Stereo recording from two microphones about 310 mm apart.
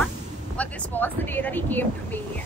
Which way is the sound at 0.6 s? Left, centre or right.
Centre.